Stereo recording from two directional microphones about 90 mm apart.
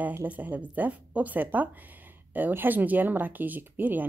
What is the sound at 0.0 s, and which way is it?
Speech, 20° right (ahead or behind).